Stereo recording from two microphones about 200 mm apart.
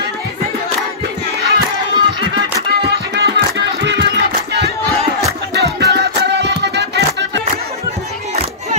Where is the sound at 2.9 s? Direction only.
55° right (ahead or behind).